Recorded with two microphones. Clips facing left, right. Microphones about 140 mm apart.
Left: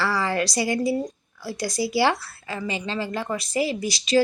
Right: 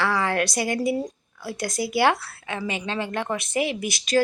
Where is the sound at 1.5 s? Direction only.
55° right (ahead or behind).